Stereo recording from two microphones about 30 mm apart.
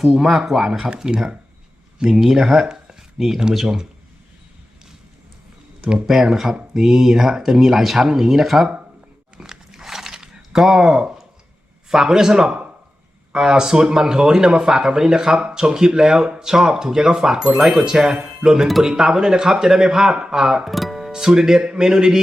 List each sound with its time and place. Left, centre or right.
0.3 s speech: centre
0.9 s speech: right
6.3 s speech: centre
9.4 s dog: centre
10.5 s speech: centre
20.1 s speech: right
20.7 s music: centre
21.1 s speech: right
21.6 s speech: right